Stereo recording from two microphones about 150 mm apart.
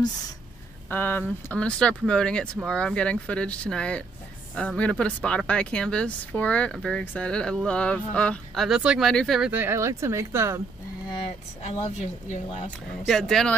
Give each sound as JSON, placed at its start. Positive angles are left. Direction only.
{"t": 0.8, "sound": "speech", "side_deg": 10}
{"t": 9.5, "sound": "speech", "side_deg": -15}
{"t": 11.2, "sound": "speech", "side_deg": 45}
{"t": 13.0, "sound": "speech", "side_deg": 0}